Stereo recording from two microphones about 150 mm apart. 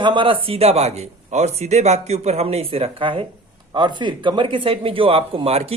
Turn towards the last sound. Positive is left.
turn(degrees=-40)  # may be behind; listen again after turning